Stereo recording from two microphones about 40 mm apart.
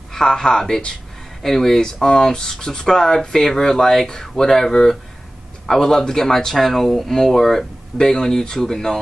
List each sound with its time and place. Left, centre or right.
0.1 s speech: centre